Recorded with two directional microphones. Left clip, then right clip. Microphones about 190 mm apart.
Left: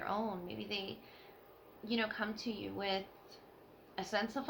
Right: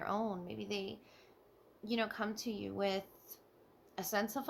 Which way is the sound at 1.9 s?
60° right (ahead or behind).